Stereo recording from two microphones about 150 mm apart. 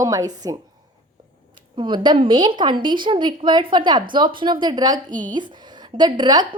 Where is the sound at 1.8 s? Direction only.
30° right (ahead or behind).